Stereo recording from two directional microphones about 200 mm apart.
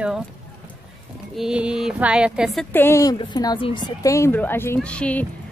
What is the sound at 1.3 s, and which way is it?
Speech, 5° right (ahead or behind).